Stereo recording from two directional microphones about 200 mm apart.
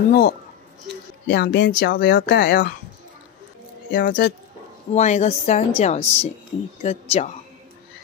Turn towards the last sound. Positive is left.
turn(degrees=30)  # may be behind; listen again after turning